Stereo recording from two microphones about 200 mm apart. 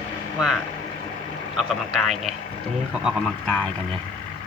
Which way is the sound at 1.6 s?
Centre (ahead or behind).